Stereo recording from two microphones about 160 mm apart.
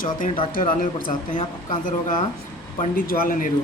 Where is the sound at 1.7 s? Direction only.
55° left (ahead or behind).